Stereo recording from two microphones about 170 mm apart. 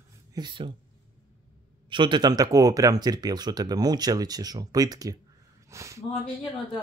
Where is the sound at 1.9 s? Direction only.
30° right (ahead or behind).